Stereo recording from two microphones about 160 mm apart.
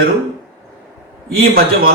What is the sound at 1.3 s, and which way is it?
Speech, 70° right (ahead or behind).